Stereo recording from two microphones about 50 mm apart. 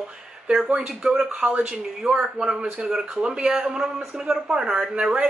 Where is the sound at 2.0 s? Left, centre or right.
Centre.